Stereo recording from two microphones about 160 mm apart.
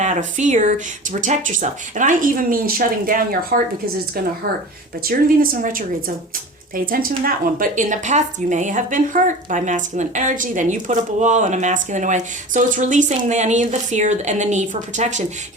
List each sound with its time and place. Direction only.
0.0 s a woman's voice: 50° right (ahead or behind); by 3.6 s 65° right (ahead or behind)
5.0 s a woman's voice: 60° right (ahead or behind)